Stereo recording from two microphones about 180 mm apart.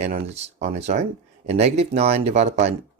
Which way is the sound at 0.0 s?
40° right (ahead or behind).